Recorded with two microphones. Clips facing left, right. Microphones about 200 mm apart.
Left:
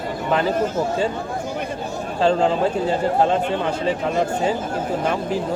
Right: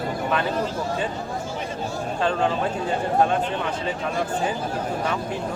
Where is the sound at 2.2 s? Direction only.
30° left (ahead or behind).